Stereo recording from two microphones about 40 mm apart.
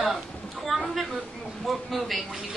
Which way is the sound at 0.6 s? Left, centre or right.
Centre.